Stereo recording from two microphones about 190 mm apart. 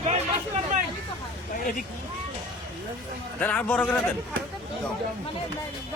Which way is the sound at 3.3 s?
10° left (ahead or behind).